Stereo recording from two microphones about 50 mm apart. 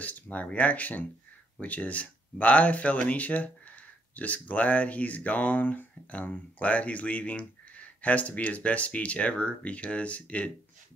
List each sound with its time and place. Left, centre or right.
0.0 s speech: left